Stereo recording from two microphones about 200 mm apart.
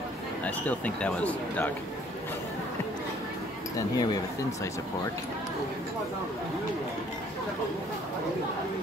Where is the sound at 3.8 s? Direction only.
15° left (ahead or behind).